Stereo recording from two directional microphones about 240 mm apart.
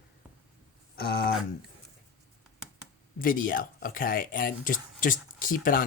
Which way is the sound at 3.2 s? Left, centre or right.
Left.